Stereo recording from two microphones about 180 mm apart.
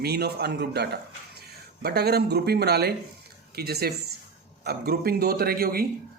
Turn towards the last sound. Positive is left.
turn(degrees=-55)  # may be behind; listen again after turning